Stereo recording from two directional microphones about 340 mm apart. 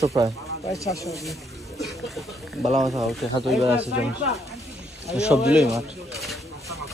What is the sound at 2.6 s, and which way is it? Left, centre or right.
Speech, centre.